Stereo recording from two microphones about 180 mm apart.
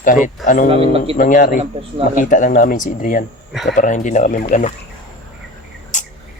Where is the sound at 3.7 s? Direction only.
45° left (ahead or behind).